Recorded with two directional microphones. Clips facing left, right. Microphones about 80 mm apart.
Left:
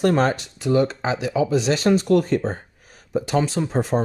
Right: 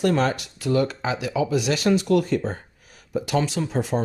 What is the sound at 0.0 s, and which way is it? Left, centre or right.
Speech, left.